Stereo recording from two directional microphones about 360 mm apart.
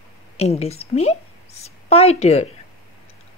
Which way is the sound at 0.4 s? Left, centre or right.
Centre.